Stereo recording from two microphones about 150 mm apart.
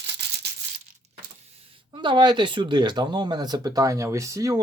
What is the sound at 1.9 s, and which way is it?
Speech, 30° right (ahead or behind).